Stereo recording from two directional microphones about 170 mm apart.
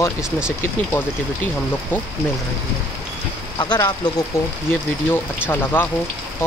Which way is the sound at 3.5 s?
25° left (ahead or behind).